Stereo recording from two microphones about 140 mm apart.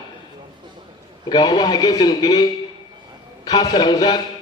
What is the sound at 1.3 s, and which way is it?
A man's voice, 30° left (ahead or behind).